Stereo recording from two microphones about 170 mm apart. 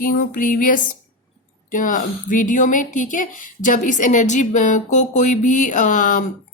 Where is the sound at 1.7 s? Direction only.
50° left (ahead or behind).